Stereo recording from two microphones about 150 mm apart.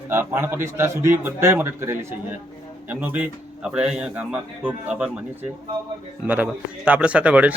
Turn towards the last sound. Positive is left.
turn(degrees=-10)  # may be behind; listen again after turning